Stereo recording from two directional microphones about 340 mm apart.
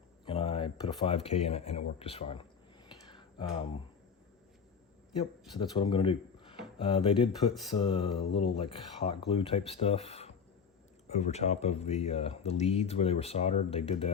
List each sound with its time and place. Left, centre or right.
0.3 s speech: centre
3.1 s a sound: centre
5.5 s speech: centre